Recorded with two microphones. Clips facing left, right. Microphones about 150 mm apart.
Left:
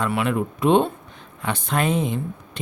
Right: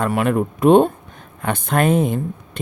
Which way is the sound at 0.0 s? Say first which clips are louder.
Right 4 dB; 45° right (ahead or behind).